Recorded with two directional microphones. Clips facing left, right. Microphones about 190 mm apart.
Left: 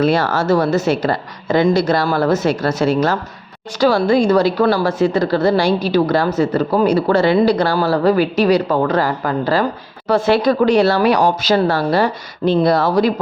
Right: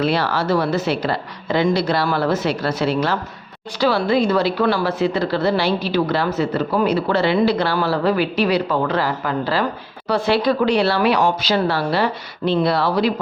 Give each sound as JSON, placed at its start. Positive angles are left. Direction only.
{"t": 0.0, "sound": "speech", "side_deg": 45}